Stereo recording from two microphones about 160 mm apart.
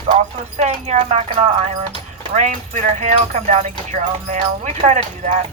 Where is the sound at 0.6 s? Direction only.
45° right (ahead or behind).